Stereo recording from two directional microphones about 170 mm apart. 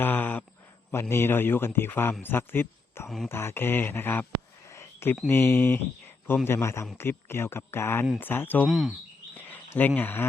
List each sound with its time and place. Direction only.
0.0 s a sound: 10° left (ahead or behind)
0.9 s a man's voice: 15° left (ahead or behind)
4.7 s a sound: 15° left (ahead or behind)
5.2 s a man's voice: 15° left (ahead or behind)
8.6 s speech: centre (ahead or behind)
9.7 s a man's voice: 10° left (ahead or behind)